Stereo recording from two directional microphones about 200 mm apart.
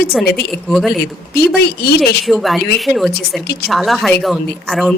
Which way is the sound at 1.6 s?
50° left (ahead or behind).